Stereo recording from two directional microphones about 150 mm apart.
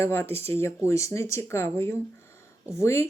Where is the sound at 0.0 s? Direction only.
15° left (ahead or behind).